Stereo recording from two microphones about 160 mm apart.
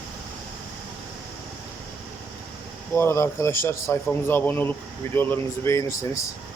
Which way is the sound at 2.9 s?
15° left (ahead or behind).